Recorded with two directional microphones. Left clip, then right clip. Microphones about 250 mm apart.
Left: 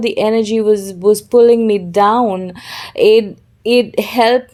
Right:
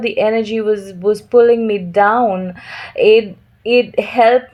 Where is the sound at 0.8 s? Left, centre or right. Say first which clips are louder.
Left 4 dB; left.